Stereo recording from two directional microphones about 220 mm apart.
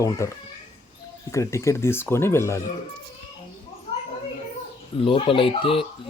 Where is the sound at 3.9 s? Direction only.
25° left (ahead or behind).